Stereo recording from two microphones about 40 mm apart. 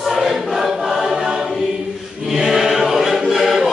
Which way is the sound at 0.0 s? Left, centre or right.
Centre.